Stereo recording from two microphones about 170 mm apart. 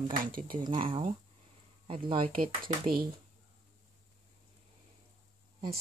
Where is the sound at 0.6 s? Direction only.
30° right (ahead or behind).